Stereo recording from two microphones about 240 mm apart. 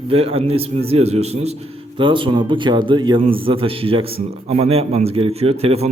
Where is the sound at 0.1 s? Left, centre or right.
Right.